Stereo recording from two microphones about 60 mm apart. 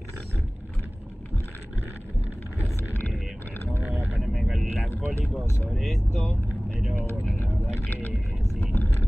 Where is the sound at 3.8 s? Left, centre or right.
Right.